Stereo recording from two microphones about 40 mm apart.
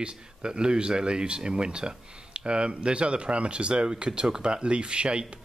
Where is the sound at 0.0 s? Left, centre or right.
Right.